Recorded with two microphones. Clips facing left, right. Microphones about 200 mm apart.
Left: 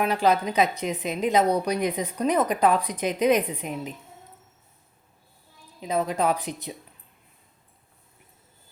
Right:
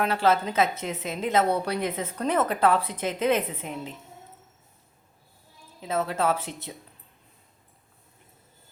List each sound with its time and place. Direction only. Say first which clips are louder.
0.0 s a woman's voice: left 1 dB; 15° left (ahead or behind)
5.8 s a woman's voice: left 2 dB; 15° left (ahead or behind)